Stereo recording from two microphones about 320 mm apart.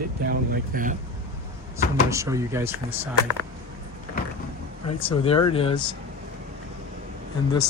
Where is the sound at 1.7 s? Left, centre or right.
Centre.